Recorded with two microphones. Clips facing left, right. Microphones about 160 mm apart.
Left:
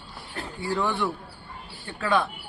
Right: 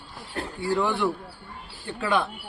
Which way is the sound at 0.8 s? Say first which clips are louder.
Right 1 dB; 10° right (ahead or behind).